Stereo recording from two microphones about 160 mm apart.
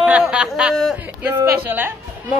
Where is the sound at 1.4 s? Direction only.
10° right (ahead or behind).